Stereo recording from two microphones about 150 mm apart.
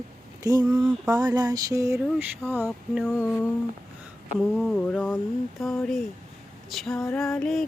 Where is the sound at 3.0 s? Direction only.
5° left (ahead or behind).